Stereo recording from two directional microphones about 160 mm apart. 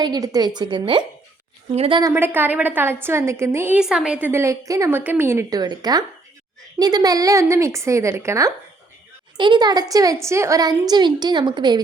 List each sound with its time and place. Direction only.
0.0 s a woman's voice: 25° right (ahead or behind)
2.0 s a woman's voice: 15° right (ahead or behind)
3.8 s a woman's voice: 5° right (ahead or behind); by 11.8 s 30° right (ahead or behind)